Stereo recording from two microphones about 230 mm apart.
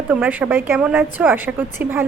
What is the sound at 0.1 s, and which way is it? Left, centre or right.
A woman's voice, centre.